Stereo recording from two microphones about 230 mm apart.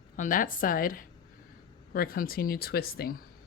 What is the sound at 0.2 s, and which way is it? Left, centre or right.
Speech, left.